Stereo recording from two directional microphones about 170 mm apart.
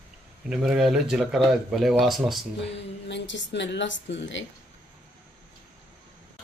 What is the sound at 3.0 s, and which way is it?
A woman's voice, 90° left.